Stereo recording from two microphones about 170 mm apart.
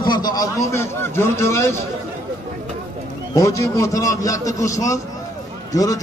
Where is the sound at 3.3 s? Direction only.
20° left (ahead or behind).